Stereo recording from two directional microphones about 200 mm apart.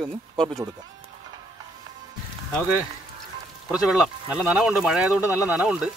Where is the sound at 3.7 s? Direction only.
Centre (ahead or behind).